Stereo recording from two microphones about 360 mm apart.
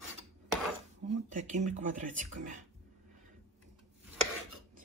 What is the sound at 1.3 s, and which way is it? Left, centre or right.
Speech, centre.